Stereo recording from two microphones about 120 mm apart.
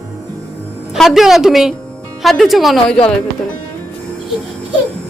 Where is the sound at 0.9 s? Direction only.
Centre (ahead or behind).